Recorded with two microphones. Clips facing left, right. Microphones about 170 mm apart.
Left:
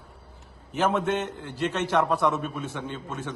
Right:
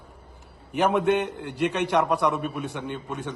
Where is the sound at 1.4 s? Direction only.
60° right (ahead or behind).